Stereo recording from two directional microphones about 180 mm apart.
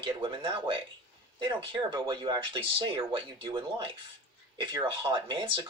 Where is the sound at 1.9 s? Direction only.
20° right (ahead or behind).